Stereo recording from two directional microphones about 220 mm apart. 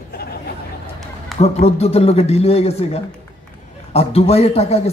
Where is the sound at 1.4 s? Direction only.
30° left (ahead or behind).